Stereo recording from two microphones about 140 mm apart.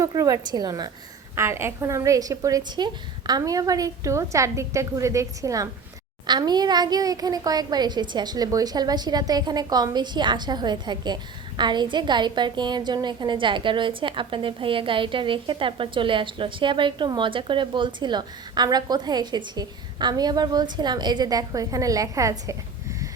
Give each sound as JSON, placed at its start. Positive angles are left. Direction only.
{"t": 0.0, "sound": "a woman's voice", "side_deg": -25}